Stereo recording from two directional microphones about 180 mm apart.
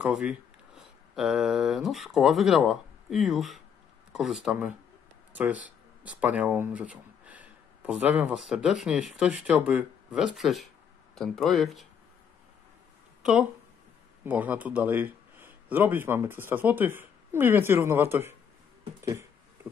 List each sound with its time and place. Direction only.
0.0 s speech: 5° right (ahead or behind)
13.2 s speech: 5° right (ahead or behind)
19.0 s a sound: 15° right (ahead or behind)